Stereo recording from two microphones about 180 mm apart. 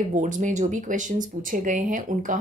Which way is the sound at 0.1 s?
45° right (ahead or behind).